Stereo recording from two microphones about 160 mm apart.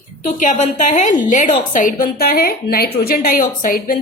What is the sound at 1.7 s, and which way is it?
A woman's voice, 60° left (ahead or behind).